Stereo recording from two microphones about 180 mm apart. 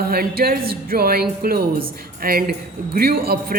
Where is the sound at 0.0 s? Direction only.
60° right (ahead or behind).